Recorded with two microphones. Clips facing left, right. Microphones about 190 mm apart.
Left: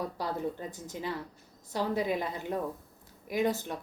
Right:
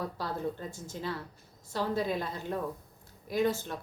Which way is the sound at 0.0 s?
15° left (ahead or behind).